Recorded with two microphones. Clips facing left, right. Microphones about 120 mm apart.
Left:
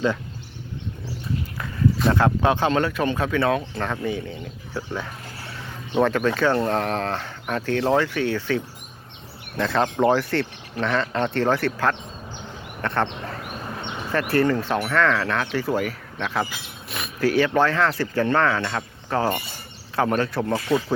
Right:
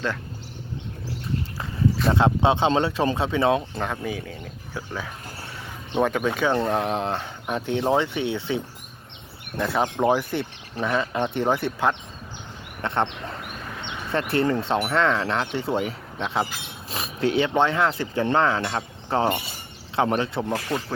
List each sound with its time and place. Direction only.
2.1 s speech: 20° right (ahead or behind)
9.6 s speech: 10° right (ahead or behind)